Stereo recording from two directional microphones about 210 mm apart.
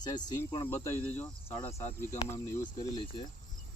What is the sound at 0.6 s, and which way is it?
Speech, 10° left (ahead or behind).